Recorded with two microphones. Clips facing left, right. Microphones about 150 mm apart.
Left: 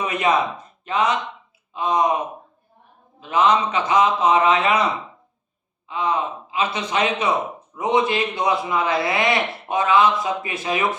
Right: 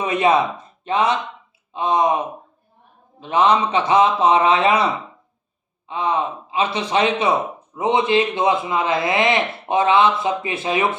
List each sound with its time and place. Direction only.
0.0 s a man's voice: 30° right (ahead or behind)
3.2 s a man's voice: 30° right (ahead or behind)
5.9 s a man's voice: 30° right (ahead or behind)